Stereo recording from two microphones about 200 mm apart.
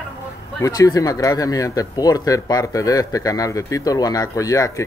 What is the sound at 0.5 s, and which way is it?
Speech, 15° left (ahead or behind).